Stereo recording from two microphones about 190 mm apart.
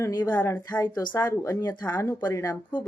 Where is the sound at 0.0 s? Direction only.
15° left (ahead or behind).